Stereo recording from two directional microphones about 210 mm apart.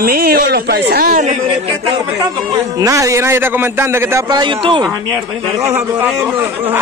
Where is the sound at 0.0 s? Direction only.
45° right (ahead or behind).